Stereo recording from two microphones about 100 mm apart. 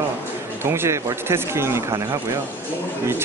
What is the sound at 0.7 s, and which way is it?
Speech, 25° right (ahead or behind).